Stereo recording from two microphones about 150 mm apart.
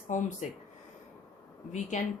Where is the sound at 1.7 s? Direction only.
50° left (ahead or behind).